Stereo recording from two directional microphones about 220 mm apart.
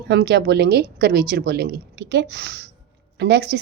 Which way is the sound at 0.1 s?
50° right (ahead or behind).